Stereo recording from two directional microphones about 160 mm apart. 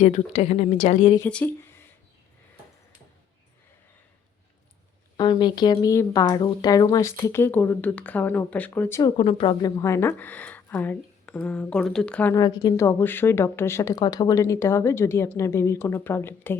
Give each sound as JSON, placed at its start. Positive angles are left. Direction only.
{"t": 0.0, "sound": "a woman's voice", "side_deg": 45}
{"t": 1.2, "sound": "a woman's voice", "side_deg": 5}
{"t": 5.1, "sound": "speech", "side_deg": 30}
{"t": 9.0, "sound": "a woman's voice", "side_deg": 30}
{"t": 12.3, "sound": "a woman's voice", "side_deg": 25}